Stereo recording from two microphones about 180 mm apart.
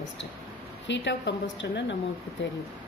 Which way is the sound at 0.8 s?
85° left.